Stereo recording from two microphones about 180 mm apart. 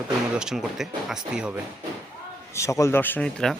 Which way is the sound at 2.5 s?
15° left (ahead or behind).